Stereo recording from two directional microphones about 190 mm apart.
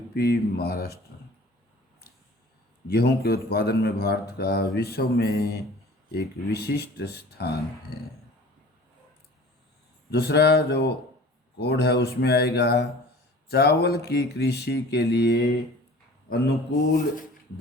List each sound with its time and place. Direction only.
0.1 s a man's voice: 55° left (ahead or behind)
2.8 s a man's voice: 60° left (ahead or behind)
10.1 s a man's voice: 60° left (ahead or behind)